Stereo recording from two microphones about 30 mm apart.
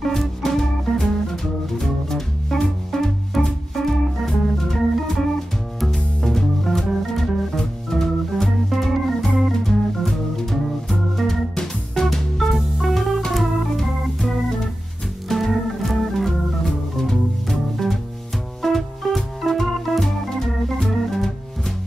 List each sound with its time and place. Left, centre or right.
0.0 s music: centre
3.7 s organ: centre
5.8 s music: centre
9.3 s organ: centre
12.0 s music: left
12.4 s music: centre
13.3 s organ: centre
17.1 s music: centre
18.6 s organ: centre
21.1 s music: centre